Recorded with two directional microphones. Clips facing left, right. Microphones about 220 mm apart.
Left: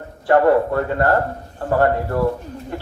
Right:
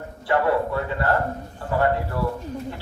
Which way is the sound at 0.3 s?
50° left (ahead or behind).